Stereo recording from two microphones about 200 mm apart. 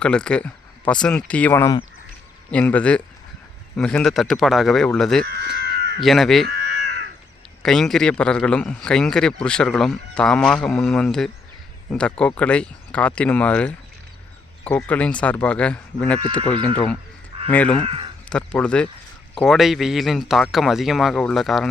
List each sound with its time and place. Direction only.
0.0 s a man's voice: 5° left (ahead or behind)
5.3 s crow: 50° right (ahead or behind)
6.0 s a man's voice: centre (ahead or behind)
7.6 s a man's voice: 5° left (ahead or behind)
17.5 s speech: 5° left (ahead or behind)
17.8 s speech: 25° right (ahead or behind)
18.3 s a man's voice: 5° left (ahead or behind)